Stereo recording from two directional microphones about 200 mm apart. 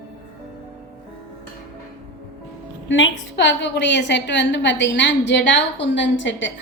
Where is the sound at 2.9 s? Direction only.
70° left (ahead or behind).